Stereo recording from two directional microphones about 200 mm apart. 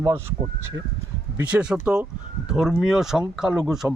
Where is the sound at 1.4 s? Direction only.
5° right (ahead or behind).